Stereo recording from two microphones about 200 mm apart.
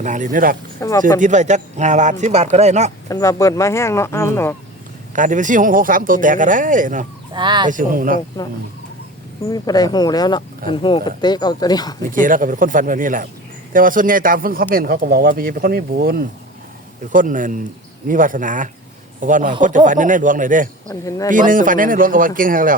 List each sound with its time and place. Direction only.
0.0 s speech: 40° right (ahead or behind)
0.8 s speech: 15° left (ahead or behind)
1.2 s speech: 35° right (ahead or behind)
3.1 s speech: 15° left (ahead or behind)
5.1 s speech: 40° right (ahead or behind)
7.3 s fowl: 20° right (ahead or behind)
7.7 s speech: 45° right (ahead or behind)
9.5 s speech: 20° left (ahead or behind)
12.1 s speech: 40° right (ahead or behind)
21.0 s speech: 15° left (ahead or behind)
21.2 s speech: 40° right (ahead or behind)